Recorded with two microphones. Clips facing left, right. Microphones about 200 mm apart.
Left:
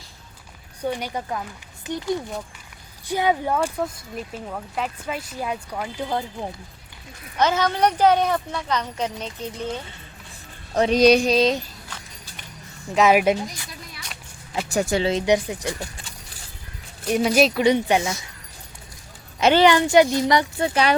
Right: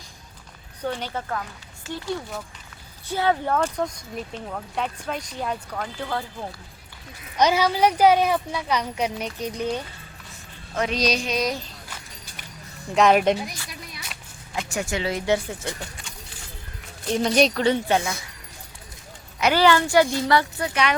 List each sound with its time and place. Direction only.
0.8 s speech: 10° left (ahead or behind)
7.3 s speech: 15° right (ahead or behind)
10.9 s a sound: 55° left (ahead or behind)
11.3 s speech: 25° left (ahead or behind)
12.9 s speech: 5° left (ahead or behind)
14.7 s speech: 35° left (ahead or behind)
15.1 s speech: 15° left (ahead or behind)
17.1 s speech: 5° left (ahead or behind)
19.4 s speech: 25° left (ahead or behind)